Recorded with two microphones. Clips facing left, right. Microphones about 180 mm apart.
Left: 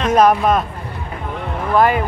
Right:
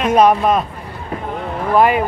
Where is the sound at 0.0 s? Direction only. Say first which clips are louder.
Right 1 dB; 5° right (ahead or behind).